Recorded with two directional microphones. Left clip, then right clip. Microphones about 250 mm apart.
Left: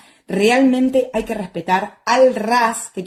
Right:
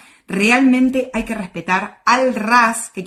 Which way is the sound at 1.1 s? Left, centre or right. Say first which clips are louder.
Left 2 dB; centre.